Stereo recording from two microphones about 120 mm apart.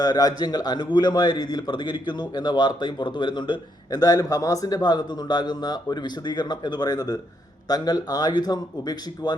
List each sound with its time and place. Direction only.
0.0 s a man's voice: 30° left (ahead or behind)